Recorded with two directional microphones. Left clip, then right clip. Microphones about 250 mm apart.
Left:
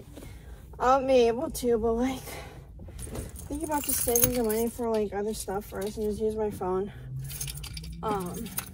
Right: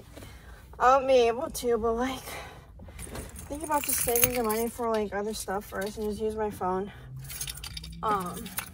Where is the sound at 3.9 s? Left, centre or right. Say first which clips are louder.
Even; right.